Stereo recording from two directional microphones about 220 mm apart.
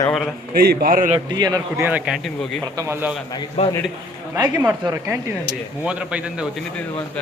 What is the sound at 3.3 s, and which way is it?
Speech, 20° left (ahead or behind).